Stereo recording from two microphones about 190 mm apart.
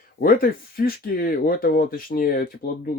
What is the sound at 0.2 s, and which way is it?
Speech, 50° left (ahead or behind).